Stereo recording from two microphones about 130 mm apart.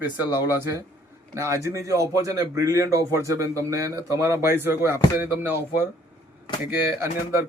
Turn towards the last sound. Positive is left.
turn(degrees=-20)  # may be behind; listen again after turning